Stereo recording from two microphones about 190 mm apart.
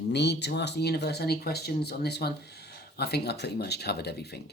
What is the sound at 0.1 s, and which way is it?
Speech, 65° left (ahead or behind).